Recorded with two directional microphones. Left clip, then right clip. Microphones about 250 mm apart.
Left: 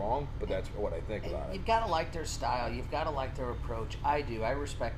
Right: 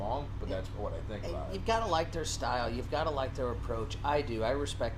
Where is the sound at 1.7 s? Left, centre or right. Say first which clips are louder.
Left 1 dB; right.